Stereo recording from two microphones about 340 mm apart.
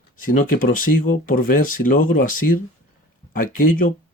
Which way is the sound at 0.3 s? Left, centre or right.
Left.